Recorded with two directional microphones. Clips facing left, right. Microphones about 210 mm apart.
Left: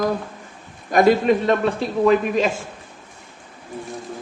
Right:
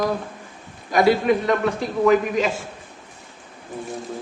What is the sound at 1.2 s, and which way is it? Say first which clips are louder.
A man's voice: left 2 dB; 30° left (ahead or behind).